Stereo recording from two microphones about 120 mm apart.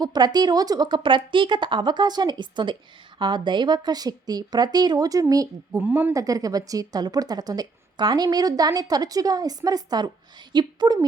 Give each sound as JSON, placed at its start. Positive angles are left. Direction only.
{"t": 0.0, "sound": "a woman's voice", "side_deg": -35}
{"t": 5.8, "sound": "speech", "side_deg": -15}
{"t": 6.1, "sound": "a woman's voice", "side_deg": -30}